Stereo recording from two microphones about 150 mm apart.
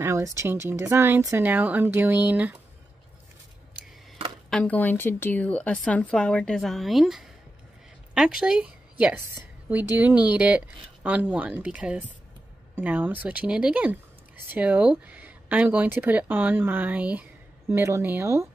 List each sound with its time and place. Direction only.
0.0 s a woman's voice: 20° right (ahead or behind)
4.5 s a woman's voice: 5° left (ahead or behind); by 18.5 s 15° right (ahead or behind)